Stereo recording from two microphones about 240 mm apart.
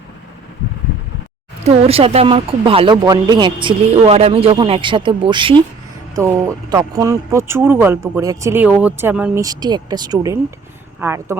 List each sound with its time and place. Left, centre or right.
1.6 s speech: right